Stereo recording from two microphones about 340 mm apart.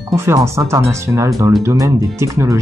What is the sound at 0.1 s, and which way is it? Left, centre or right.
Speech, centre.